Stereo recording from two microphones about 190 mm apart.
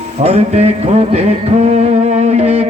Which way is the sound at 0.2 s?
35° right (ahead or behind).